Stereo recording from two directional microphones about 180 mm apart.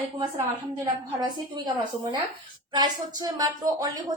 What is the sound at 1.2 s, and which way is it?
Speech, 25° right (ahead or behind).